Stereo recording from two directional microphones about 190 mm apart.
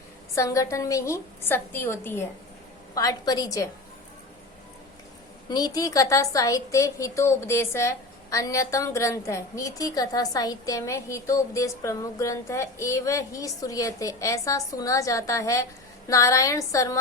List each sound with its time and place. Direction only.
0.3 s a woman's voice: 15° left (ahead or behind)
5.5 s a woman's voice: 20° left (ahead or behind)